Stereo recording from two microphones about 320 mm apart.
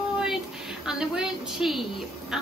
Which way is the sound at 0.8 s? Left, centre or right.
Centre.